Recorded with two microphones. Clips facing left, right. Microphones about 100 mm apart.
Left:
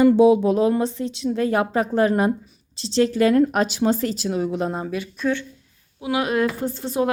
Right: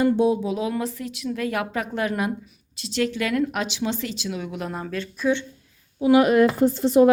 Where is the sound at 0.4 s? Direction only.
45° left (ahead or behind).